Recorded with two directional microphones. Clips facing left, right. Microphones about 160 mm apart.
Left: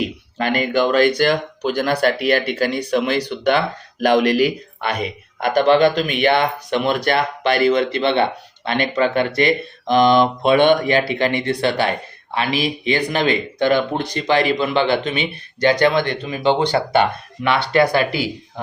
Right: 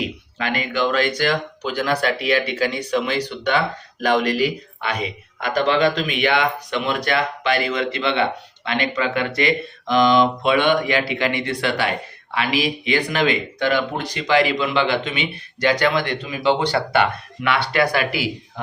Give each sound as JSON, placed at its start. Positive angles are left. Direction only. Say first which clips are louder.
{"t": 0.3, "sound": "speech", "louder": "left 5 dB", "side_deg": 45}
{"t": 4.3, "sound": "speech", "louder": "left 4 dB", "side_deg": 55}
{"t": 7.7, "sound": "speech", "louder": "left 5 dB", "side_deg": 55}
{"t": 8.1, "sound": "speech", "louder": "left 3 dB", "side_deg": 40}
{"t": 10.8, "sound": "speech", "louder": "left 3 dB", "side_deg": 35}